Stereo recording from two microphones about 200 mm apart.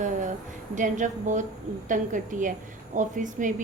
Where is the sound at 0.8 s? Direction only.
40° right (ahead or behind).